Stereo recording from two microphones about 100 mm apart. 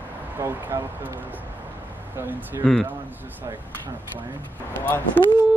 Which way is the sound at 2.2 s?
20° right (ahead or behind).